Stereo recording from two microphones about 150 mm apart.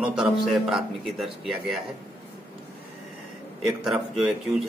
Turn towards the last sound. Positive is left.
turn(degrees=0)  # may be behind; listen again after turning